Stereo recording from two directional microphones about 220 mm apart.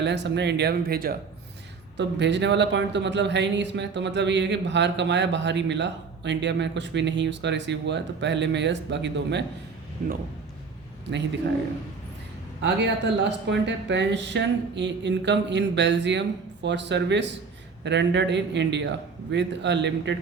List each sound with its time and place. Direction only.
0.0 s speech: 50° right (ahead or behind)
12.6 s speech: 50° right (ahead or behind)